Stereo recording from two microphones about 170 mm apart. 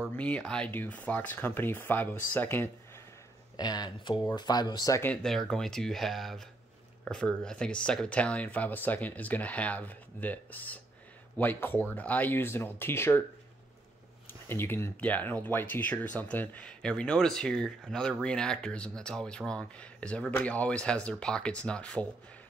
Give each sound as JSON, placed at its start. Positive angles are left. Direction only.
{"t": 0.1, "sound": "speech", "side_deg": 5}
{"t": 3.5, "sound": "speech", "side_deg": 25}
{"t": 5.1, "sound": "speech", "side_deg": 0}
{"t": 14.5, "sound": "speech", "side_deg": 15}